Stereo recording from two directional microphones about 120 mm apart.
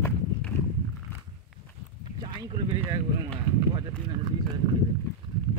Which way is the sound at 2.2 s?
40° right (ahead or behind).